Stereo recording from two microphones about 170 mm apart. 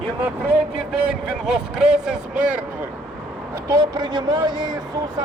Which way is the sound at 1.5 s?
5° right (ahead or behind).